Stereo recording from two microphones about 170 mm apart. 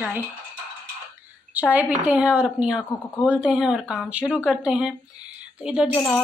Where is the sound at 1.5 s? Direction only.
10° right (ahead or behind).